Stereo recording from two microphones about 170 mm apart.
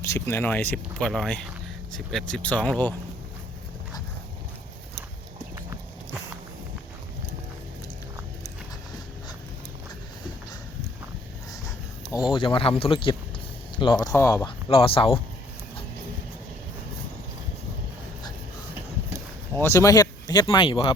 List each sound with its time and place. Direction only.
0.0 s speech: 15° left (ahead or behind)
12.3 s speech: 30° left (ahead or behind)
14.7 s speech: 30° left (ahead or behind)
19.5 s speech: 15° left (ahead or behind); by 20.9 s 30° left (ahead or behind)